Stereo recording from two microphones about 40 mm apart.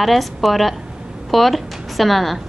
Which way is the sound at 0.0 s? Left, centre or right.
Centre.